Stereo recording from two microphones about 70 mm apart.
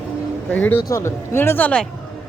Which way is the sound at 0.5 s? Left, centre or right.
Left.